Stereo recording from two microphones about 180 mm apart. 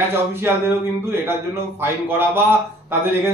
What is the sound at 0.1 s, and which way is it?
Speech, 15° right (ahead or behind).